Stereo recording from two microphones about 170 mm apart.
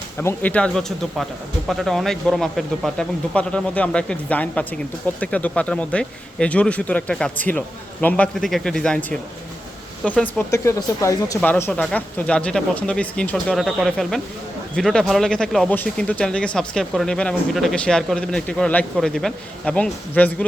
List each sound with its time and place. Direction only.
0.2 s speech: 10° left (ahead or behind)